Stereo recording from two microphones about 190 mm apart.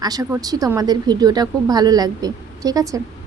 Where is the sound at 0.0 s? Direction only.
20° right (ahead or behind).